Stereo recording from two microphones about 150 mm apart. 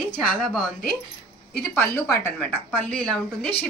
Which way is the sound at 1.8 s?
20° left (ahead or behind).